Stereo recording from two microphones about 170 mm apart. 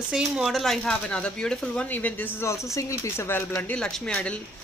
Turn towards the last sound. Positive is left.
turn(degrees=10)  # may be behind; listen again after turning